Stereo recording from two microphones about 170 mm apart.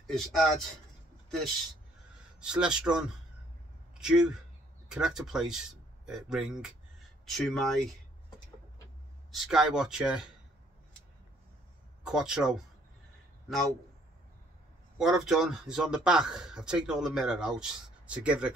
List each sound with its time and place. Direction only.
0.0 s a man's voice: centre (ahead or behind)
2.4 s a man's voice: 5° right (ahead or behind)
9.3 s a man's voice: centre (ahead or behind)
12.0 s a man's voice: 5° right (ahead or behind)
15.0 s a man's voice: 5° right (ahead or behind)